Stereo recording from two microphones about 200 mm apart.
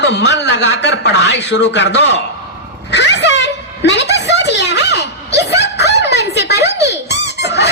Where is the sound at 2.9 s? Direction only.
60° left (ahead or behind).